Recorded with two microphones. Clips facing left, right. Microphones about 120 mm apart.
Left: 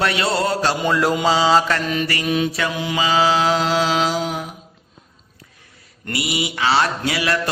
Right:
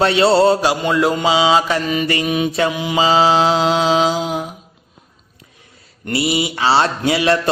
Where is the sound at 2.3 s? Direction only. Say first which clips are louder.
Right 1 dB; 10° right (ahead or behind).